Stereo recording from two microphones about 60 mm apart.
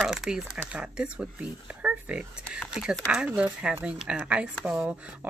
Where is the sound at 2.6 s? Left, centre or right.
Centre.